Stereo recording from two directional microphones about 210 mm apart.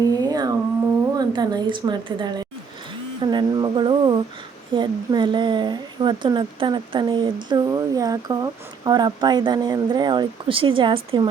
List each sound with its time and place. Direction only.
0.1 s a sound: 20° right (ahead or behind)
1.2 s a woman's voice: 20° right (ahead or behind)
3.3 s speech: 20° right (ahead or behind)